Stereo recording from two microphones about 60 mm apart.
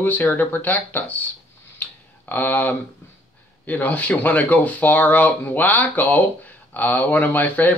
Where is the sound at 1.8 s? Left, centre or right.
Left.